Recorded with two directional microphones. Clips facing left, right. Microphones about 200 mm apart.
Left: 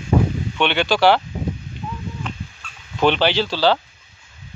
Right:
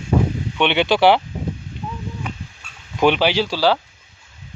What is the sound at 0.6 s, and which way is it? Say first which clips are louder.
Speech: right 2 dB; 20° right (ahead or behind).